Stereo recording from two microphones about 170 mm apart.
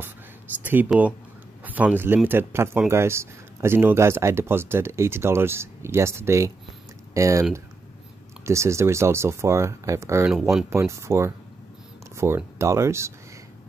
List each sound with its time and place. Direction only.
0.7 s speech: 10° right (ahead or behind)
8.5 s speech: 15° right (ahead or behind)
10.3 s speech: centre (ahead or behind)
10.7 s speech: 15° right (ahead or behind)